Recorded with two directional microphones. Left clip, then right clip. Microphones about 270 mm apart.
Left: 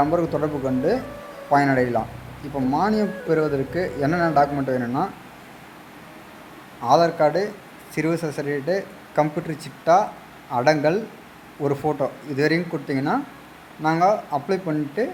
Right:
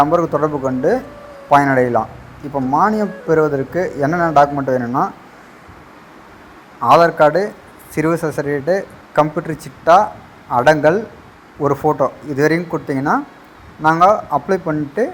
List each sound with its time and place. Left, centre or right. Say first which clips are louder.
0.0 s a man's voice: right 7 dB; centre
6.8 s a man's voice: right 7 dB; centre